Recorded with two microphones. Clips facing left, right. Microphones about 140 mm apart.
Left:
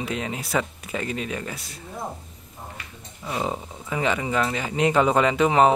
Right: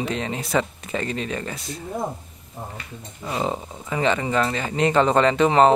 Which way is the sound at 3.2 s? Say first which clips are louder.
Right 2 dB; centre (ahead or behind).